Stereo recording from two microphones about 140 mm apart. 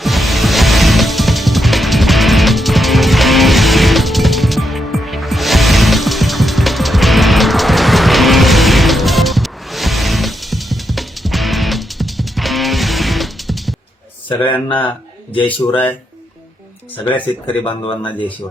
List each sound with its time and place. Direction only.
0.0 s music: centre (ahead or behind)
14.3 s speech: 35° left (ahead or behind)
15.6 s speech: 15° left (ahead or behind)
17.1 s speech: 10° left (ahead or behind)
17.6 s speech: 35° left (ahead or behind)